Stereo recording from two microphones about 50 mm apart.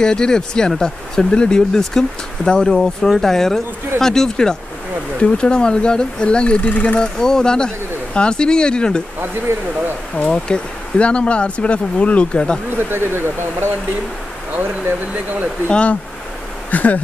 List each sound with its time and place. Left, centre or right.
0.0 s speech: centre
7.0 s speech: centre
9.5 s speech: right
10.2 s speech: centre
12.7 s speech: right
15.7 s speech: left
16.7 s insect: left